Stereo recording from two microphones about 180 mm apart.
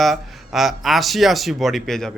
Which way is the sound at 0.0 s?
Centre (ahead or behind).